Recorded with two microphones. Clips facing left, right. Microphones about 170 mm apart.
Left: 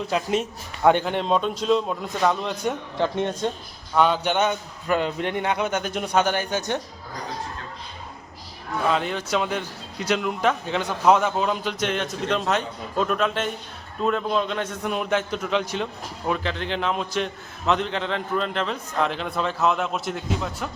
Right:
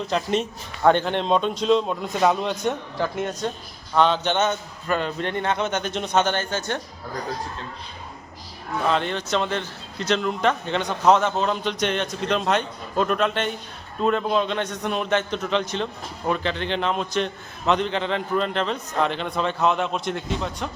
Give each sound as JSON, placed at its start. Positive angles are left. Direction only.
{"t": 0.1, "sound": "a man's voice", "side_deg": 5}
{"t": 3.0, "sound": "a woman's voice", "side_deg": 25}
{"t": 3.9, "sound": "speech", "side_deg": 10}
{"t": 8.9, "sound": "a man's voice", "side_deg": 5}